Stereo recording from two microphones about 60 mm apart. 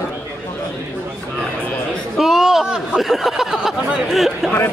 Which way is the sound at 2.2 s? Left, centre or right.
Centre.